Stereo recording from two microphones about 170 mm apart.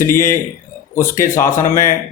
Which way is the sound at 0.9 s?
15° left (ahead or behind).